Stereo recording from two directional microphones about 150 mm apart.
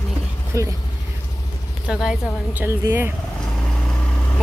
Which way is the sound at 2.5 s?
15° right (ahead or behind).